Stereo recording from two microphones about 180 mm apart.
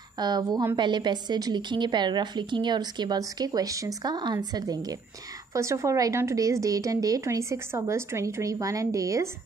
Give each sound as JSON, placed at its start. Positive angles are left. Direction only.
{"t": 0.2, "sound": "a woman's voice", "side_deg": -20}